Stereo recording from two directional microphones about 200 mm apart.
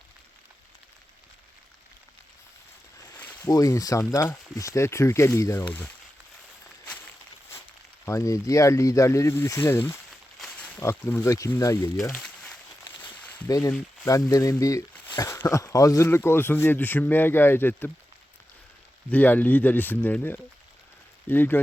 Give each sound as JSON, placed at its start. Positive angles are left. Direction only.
{"t": 3.0, "sound": "a sound", "side_deg": 10}
{"t": 3.5, "sound": "speech", "side_deg": 15}
{"t": 8.0, "sound": "speech", "side_deg": 15}
{"t": 10.3, "sound": "a sound", "side_deg": 0}
{"t": 10.8, "sound": "speech", "side_deg": 15}
{"t": 12.0, "sound": "a sound", "side_deg": 5}
{"t": 12.8, "sound": "walk", "side_deg": 10}
{"t": 13.5, "sound": "speech", "side_deg": 20}
{"t": 19.1, "sound": "speech", "side_deg": 10}